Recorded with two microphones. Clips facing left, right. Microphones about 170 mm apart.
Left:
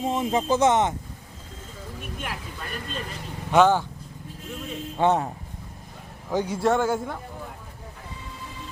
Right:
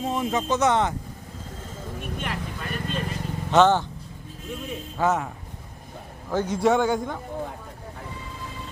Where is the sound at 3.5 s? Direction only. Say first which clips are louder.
Even; 10° left (ahead or behind).